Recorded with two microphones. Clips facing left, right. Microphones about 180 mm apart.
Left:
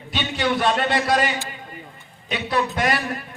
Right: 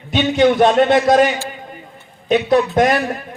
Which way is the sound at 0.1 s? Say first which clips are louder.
Right 10 dB; 45° right (ahead or behind).